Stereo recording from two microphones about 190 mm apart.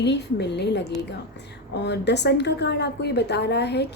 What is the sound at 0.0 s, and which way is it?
A woman's voice, 65° left (ahead or behind).